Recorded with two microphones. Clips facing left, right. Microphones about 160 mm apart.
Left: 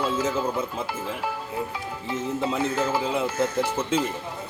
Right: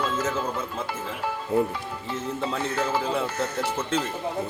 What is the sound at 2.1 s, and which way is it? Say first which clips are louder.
Speech: left 3 dB; 15° left (ahead or behind).